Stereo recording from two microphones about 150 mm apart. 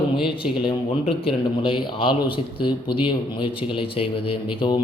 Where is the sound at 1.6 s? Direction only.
35° left (ahead or behind).